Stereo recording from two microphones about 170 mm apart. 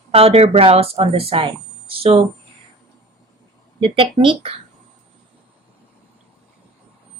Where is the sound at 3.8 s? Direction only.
30° right (ahead or behind).